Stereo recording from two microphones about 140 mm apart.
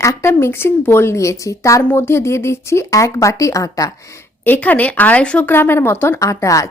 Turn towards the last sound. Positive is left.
turn(degrees=20)  # may be behind; listen again after turning